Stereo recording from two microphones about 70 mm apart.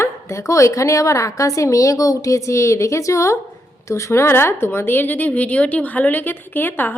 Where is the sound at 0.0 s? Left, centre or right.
Left.